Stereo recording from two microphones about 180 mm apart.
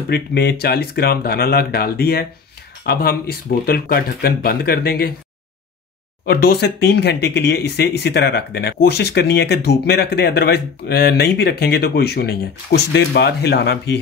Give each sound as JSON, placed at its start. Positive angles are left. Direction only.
{"t": 0.1, "sound": "speech", "side_deg": 65}
{"t": 6.2, "sound": "speech", "side_deg": 65}